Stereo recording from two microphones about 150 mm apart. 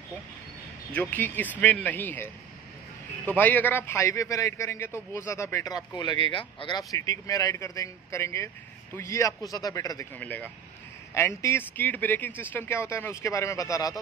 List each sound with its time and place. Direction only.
0.9 s speech: 10° left (ahead or behind)
3.3 s a man's voice: 10° left (ahead or behind); by 6.8 s 30° left (ahead or behind)
6.9 s a man's voice: 20° left (ahead or behind)